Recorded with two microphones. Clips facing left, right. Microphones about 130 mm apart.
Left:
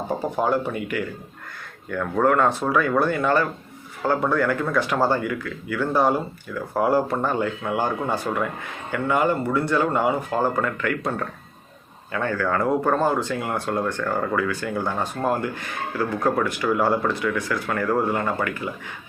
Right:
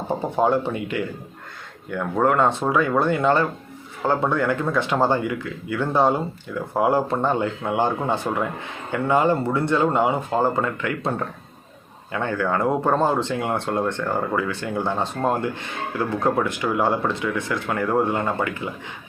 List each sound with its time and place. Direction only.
0.1 s speech: 25° right (ahead or behind)